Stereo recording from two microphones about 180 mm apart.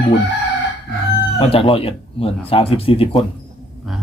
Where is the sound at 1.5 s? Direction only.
30° left (ahead or behind).